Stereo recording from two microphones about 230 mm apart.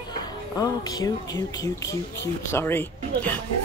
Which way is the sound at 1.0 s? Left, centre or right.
Centre.